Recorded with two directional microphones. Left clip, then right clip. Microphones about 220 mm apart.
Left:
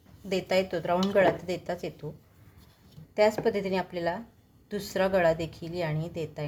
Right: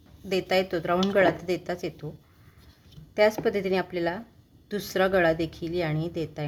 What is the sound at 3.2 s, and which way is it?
A woman's voice, 10° right (ahead or behind).